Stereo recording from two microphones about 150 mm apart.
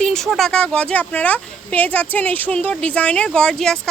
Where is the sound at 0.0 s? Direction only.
5° left (ahead or behind).